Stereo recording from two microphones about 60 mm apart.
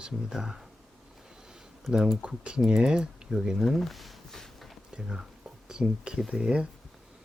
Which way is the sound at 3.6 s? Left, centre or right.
Centre.